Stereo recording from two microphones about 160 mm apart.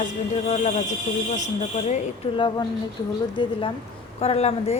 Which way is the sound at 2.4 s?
30° left (ahead or behind).